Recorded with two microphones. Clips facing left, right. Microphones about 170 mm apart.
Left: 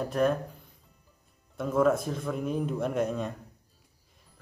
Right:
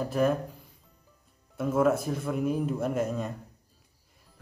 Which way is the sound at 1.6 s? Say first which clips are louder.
Even; 5° right (ahead or behind).